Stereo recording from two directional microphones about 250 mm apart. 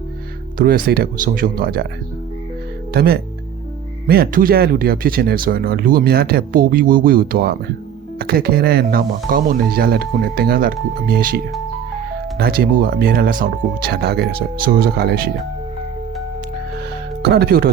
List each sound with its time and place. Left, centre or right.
0.6 s speech: right
2.9 s speech: right
12.4 s speech: right
17.2 s speech: right